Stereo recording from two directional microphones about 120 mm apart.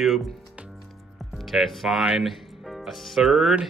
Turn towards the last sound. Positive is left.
turn(degrees=0)  # may be behind; listen again after turning